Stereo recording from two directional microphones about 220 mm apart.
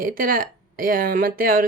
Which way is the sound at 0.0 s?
40° right (ahead or behind).